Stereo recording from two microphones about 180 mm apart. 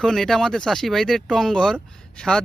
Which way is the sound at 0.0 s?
Centre (ahead or behind).